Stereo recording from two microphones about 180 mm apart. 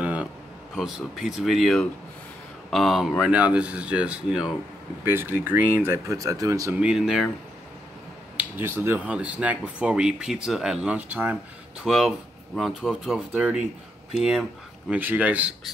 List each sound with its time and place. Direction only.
0.0 s a sound: 5° right (ahead or behind)
0.7 s speech: centre (ahead or behind); by 6.8 s 15° right (ahead or behind)
6.8 s speech: 5° right (ahead or behind)
8.4 s speech: 10° right (ahead or behind)